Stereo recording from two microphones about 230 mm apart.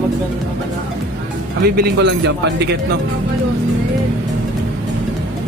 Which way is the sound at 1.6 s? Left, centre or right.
Right.